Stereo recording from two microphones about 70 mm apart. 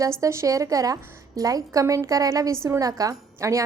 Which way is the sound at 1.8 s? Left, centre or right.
Right.